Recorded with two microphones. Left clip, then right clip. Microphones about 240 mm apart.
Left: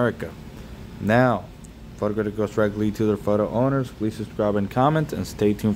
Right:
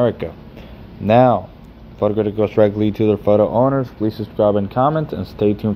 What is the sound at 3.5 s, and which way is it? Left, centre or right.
Speech, centre.